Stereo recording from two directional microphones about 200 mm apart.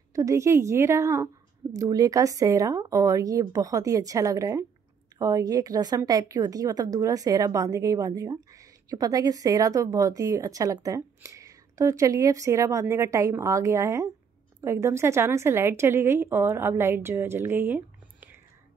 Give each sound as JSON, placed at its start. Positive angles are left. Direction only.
{"t": 0.1, "sound": "a woman's voice", "side_deg": -15}